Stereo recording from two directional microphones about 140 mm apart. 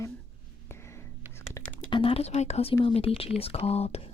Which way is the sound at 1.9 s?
40° left (ahead or behind).